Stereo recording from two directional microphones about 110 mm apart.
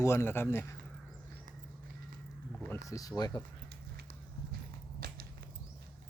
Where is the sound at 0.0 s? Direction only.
25° left (ahead or behind).